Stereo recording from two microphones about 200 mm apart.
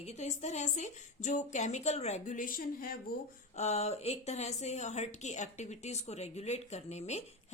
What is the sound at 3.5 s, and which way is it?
A woman's voice, 35° left (ahead or behind).